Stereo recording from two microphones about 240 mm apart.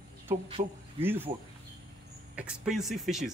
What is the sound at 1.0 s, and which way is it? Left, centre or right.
Speech, centre.